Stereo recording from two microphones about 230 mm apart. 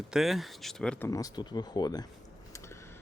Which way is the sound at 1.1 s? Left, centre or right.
Centre.